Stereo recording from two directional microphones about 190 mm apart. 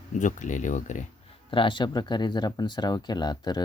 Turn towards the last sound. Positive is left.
turn(degrees=20)  # may be behind; listen again after turning